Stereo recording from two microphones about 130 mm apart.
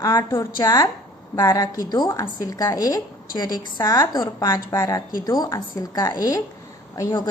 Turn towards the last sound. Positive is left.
turn(degrees=30)  # may be behind; listen again after turning